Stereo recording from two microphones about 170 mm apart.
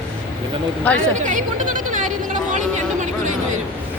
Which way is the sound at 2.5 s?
45° right (ahead or behind).